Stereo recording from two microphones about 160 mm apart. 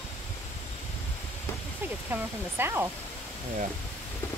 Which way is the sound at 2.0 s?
15° right (ahead or behind).